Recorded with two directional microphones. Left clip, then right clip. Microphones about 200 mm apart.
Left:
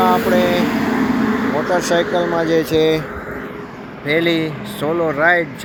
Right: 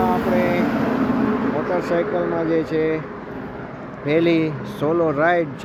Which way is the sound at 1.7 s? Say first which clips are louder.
Left 6 dB; 15° left (ahead or behind).